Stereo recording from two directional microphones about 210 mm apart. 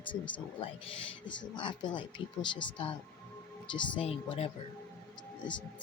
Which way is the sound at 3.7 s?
25° left (ahead or behind).